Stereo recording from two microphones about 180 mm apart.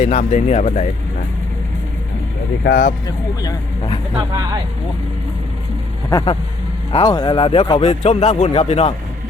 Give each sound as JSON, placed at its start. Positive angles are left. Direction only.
{"t": 0.0, "sound": "speech", "side_deg": 40}
{"t": 2.6, "sound": "speech", "side_deg": 60}
{"t": 3.4, "sound": "speech", "side_deg": 25}
{"t": 4.2, "sound": "speech", "side_deg": -25}
{"t": 6.1, "sound": "speech", "side_deg": 20}